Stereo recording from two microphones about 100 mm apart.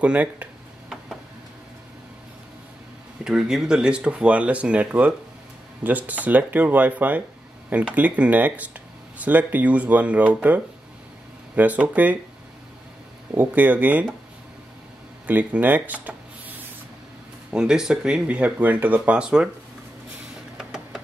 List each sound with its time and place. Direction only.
0.0 s speech: 15° right (ahead or behind)
3.3 s speech: 5° right (ahead or behind)
13.3 s speech: 15° right (ahead or behind)
15.2 s speech: 15° right (ahead or behind)
20.5 s a sound: centre (ahead or behind)